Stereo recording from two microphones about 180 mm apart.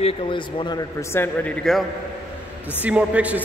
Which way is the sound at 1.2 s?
5° left (ahead or behind).